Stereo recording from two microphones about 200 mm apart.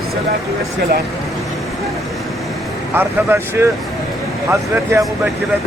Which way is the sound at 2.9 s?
10° right (ahead or behind).